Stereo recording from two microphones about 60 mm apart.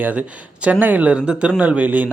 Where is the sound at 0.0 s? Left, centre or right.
Right.